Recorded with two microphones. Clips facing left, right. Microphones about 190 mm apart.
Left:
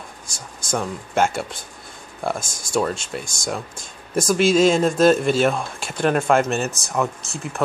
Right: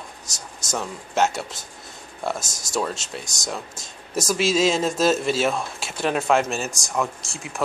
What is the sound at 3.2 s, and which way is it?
Speech, 25° left (ahead or behind).